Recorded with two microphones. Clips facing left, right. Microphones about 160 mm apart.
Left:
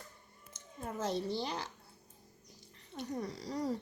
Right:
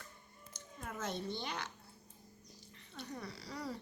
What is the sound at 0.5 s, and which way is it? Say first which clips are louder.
Speech: left 5 dB; 30° left (ahead or behind).